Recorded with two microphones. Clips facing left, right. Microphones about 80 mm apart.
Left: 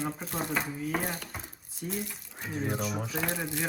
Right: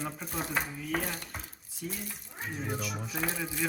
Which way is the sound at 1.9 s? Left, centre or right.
Left.